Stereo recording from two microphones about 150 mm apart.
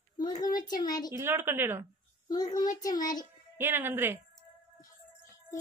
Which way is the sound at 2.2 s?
25° left (ahead or behind).